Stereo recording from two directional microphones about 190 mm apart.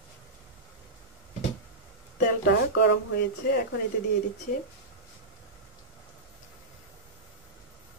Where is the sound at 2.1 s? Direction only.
65° left (ahead or behind).